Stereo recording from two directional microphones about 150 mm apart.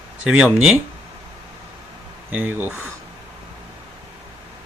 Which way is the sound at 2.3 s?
10° right (ahead or behind).